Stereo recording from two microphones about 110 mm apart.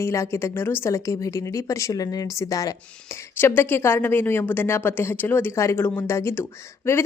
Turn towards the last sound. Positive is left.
turn(degrees=20)  # may be behind; listen again after turning